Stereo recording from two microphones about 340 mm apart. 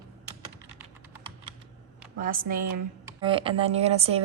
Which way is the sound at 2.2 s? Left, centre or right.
Right.